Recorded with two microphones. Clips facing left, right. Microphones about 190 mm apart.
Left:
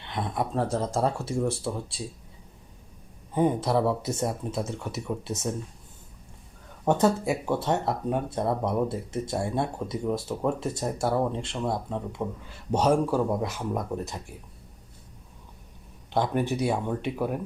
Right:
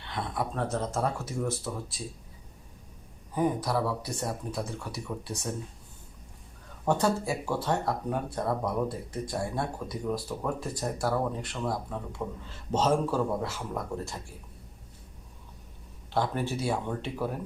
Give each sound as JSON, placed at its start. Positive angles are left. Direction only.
{"t": 0.0, "sound": "speech", "side_deg": 20}
{"t": 0.5, "sound": "speech", "side_deg": 30}
{"t": 3.3, "sound": "speech", "side_deg": 25}
{"t": 6.8, "sound": "speech", "side_deg": 20}
{"t": 16.1, "sound": "speech", "side_deg": 20}